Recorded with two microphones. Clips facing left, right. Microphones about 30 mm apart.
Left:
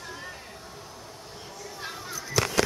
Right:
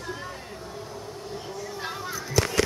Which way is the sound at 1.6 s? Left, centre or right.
Centre.